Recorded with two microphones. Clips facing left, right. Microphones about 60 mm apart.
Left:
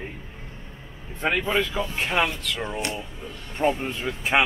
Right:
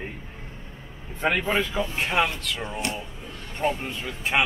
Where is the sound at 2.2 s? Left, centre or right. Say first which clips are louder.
Even; centre.